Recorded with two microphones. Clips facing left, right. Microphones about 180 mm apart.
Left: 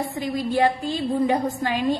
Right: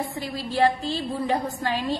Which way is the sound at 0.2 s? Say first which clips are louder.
Left 2 dB; 15° left (ahead or behind).